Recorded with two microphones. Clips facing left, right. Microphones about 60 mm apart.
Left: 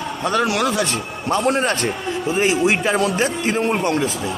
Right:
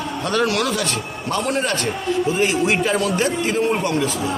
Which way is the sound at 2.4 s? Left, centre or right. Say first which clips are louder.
Left 5 dB; centre.